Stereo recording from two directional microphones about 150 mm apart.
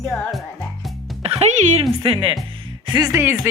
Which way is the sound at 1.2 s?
50° right (ahead or behind).